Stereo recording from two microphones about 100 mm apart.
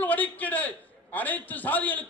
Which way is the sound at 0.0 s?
15° left (ahead or behind).